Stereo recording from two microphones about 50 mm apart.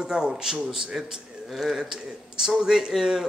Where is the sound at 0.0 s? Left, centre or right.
Centre.